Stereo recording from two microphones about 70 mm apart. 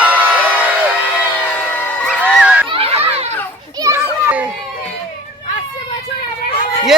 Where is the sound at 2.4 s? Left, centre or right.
Right.